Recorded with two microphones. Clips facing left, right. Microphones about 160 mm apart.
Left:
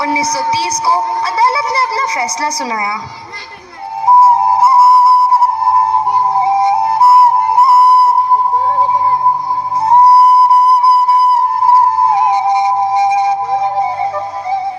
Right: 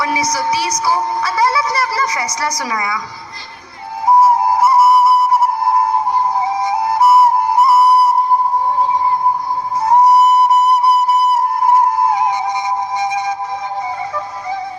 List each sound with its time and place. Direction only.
0.0 s speech: 25° left (ahead or behind)
4.0 s flute: 25° left (ahead or behind)
9.9 s music: 30° left (ahead or behind)